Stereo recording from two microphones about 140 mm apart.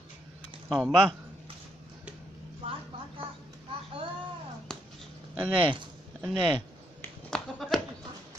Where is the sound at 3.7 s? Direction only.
40° right (ahead or behind).